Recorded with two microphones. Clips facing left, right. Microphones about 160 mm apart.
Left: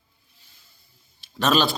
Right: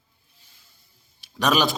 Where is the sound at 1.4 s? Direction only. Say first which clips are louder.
Even; 15° right (ahead or behind).